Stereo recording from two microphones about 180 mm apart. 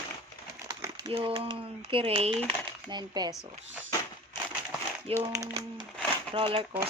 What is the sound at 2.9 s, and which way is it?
Speech, 20° right (ahead or behind).